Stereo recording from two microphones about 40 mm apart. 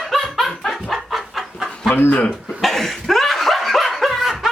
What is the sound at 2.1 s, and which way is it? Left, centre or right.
Speech, left.